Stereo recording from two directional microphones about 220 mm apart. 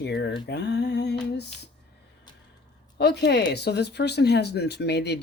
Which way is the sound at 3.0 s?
50° left (ahead or behind).